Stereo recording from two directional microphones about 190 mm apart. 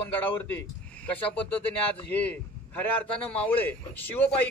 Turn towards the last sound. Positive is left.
turn(degrees=10)  # may be behind; listen again after turning